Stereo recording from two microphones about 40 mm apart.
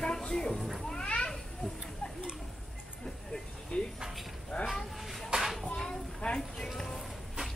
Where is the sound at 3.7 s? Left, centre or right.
Left.